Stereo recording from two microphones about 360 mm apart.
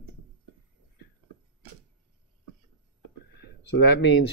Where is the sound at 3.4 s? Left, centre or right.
Left.